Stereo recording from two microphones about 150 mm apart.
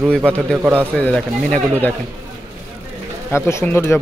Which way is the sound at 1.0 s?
10° left (ahead or behind).